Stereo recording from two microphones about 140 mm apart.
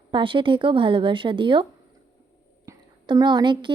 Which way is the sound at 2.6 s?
30° right (ahead or behind).